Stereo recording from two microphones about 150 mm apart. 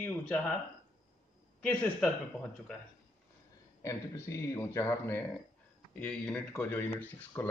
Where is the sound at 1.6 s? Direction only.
10° left (ahead or behind).